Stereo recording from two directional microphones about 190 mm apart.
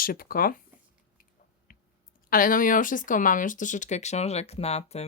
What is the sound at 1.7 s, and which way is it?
Clicking, 50° left (ahead or behind).